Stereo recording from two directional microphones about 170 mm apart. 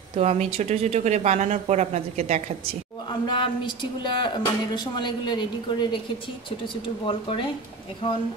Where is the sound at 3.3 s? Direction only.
30° left (ahead or behind).